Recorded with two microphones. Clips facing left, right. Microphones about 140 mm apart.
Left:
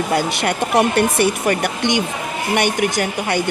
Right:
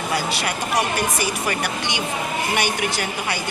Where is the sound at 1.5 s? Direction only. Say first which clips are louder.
Left 7 dB; 50° left (ahead or behind).